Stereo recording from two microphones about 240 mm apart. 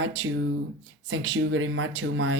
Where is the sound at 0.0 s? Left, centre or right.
Right.